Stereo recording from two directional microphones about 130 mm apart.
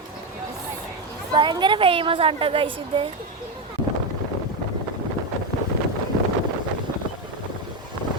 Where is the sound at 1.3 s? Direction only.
35° right (ahead or behind).